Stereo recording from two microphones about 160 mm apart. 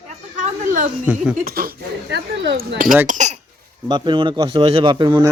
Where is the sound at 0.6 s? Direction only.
50° right (ahead or behind).